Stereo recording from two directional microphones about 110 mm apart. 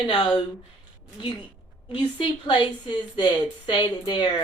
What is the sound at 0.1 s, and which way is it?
Speech, 45° left (ahead or behind).